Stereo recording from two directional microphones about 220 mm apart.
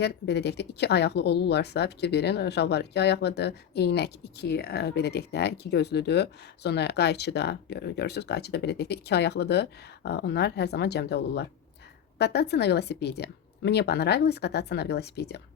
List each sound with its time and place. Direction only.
0.0 s speech: 50° left (ahead or behind)